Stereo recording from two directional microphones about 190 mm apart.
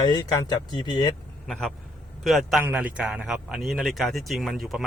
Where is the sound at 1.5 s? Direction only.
Centre (ahead or behind).